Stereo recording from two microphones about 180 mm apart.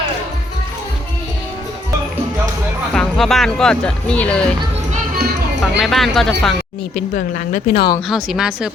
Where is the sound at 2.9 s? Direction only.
Centre (ahead or behind).